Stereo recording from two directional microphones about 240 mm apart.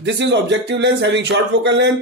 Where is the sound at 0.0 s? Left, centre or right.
Right.